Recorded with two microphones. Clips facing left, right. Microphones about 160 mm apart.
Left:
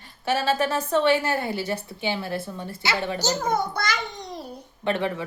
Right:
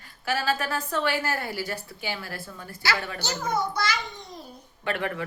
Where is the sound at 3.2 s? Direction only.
40° left (ahead or behind).